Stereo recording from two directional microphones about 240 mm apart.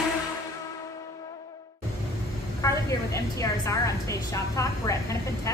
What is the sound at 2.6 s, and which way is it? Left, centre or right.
A woman's voice, centre.